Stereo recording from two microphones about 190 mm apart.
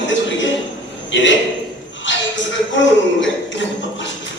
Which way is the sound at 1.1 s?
75° left (ahead or behind).